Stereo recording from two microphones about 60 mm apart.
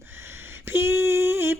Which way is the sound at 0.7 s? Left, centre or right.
Right.